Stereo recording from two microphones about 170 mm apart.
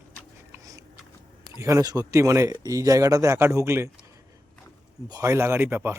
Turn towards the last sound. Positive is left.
turn(degrees=-10)  # may be behind; listen again after turning